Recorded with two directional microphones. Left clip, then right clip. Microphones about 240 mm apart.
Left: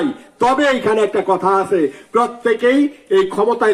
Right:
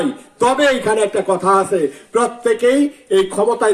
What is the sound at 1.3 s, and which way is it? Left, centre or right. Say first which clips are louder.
Speech: right 1 dB; left.